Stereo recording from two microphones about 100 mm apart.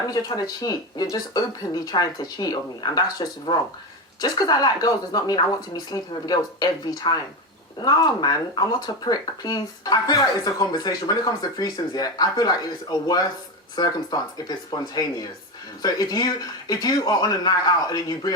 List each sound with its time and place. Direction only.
0.1 s speech: 40° left (ahead or behind)